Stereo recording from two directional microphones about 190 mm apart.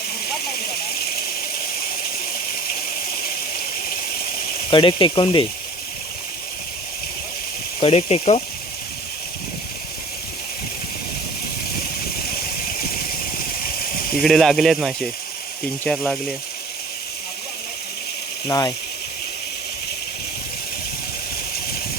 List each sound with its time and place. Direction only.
0.3 s a sound: 55° left (ahead or behind)
4.7 s speech: 25° left (ahead or behind)
7.8 s speech: 30° left (ahead or behind)
14.2 s speech: centre (ahead or behind)
18.4 s speech: 20° left (ahead or behind)